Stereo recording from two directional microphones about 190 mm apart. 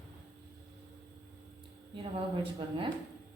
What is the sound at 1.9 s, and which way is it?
Speech, 25° right (ahead or behind).